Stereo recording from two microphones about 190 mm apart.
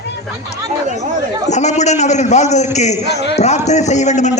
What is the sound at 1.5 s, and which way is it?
A man's voice, 35° left (ahead or behind).